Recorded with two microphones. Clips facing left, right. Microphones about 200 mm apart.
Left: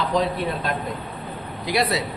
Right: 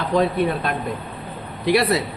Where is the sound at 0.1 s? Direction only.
55° right (ahead or behind).